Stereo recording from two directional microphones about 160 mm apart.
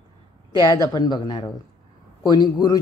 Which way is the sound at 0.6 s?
25° left (ahead or behind).